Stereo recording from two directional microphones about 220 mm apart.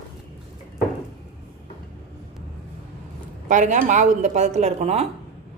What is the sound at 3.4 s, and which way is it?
A woman's voice, 35° right (ahead or behind).